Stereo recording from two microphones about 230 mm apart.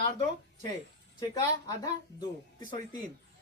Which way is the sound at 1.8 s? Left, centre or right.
Centre.